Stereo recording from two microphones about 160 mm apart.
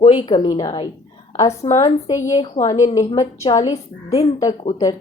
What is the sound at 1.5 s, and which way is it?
Speech, 45° left (ahead or behind).